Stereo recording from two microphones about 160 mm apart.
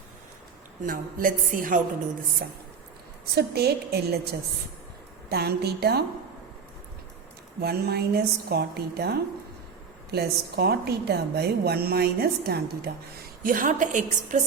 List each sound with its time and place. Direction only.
0.8 s a woman's voice: 55° right (ahead or behind)
2.4 s a woman's voice: 75° right (ahead or behind)
5.3 s a woman's voice: 80° right
7.6 s a woman's voice: 80° right
13.4 s a woman's voice: 60° right (ahead or behind)